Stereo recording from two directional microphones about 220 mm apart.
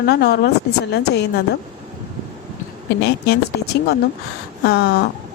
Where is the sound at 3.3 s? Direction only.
45° left (ahead or behind).